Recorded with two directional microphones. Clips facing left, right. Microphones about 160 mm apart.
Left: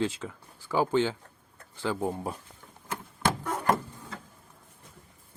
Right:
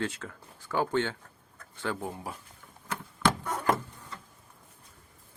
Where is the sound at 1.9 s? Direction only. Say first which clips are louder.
Left 8 dB; 30° left (ahead or behind).